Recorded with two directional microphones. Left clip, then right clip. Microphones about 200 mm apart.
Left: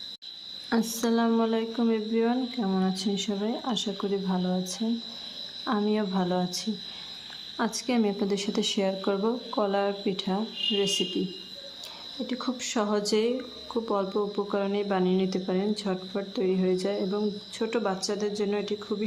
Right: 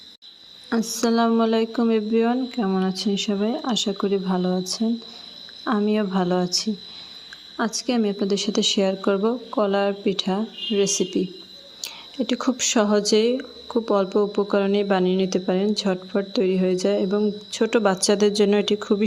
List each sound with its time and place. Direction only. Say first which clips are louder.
0.7 s speech: right 5 dB; 20° right (ahead or behind); by 19.0 s 35° right (ahead or behind)